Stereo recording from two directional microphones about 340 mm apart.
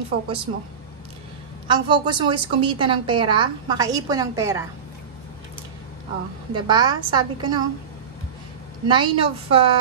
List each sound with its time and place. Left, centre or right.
1.7 s a woman's voice: centre
6.5 s a woman's voice: centre
8.8 s a woman's voice: centre